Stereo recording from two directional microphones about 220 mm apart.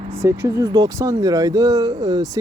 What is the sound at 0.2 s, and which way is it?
Speech, 15° right (ahead or behind).